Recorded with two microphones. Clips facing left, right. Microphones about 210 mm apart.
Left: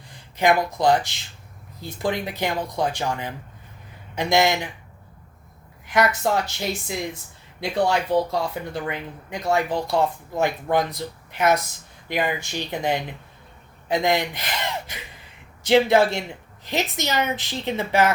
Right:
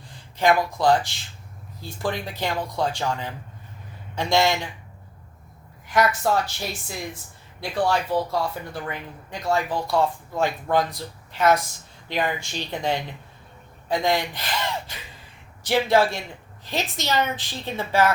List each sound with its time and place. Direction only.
0.1 s speech: 15° left (ahead or behind)
5.8 s speech: 20° left (ahead or behind)